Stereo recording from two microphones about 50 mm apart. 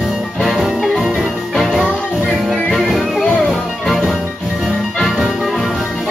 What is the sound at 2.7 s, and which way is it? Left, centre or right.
Music, centre.